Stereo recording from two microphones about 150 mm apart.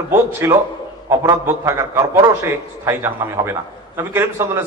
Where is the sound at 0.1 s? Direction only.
15° right (ahead or behind).